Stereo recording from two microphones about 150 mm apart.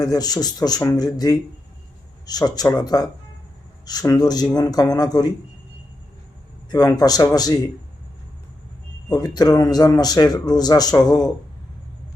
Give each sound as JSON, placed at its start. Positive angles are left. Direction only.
{"t": 0.0, "sound": "a man's voice", "side_deg": 25}
{"t": 6.7, "sound": "a man's voice", "side_deg": 25}
{"t": 9.0, "sound": "a man's voice", "side_deg": 25}